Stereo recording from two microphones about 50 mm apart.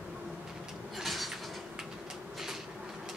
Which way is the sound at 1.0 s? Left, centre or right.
Centre.